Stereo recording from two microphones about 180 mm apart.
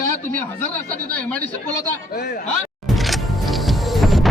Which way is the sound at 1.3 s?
10° left (ahead or behind).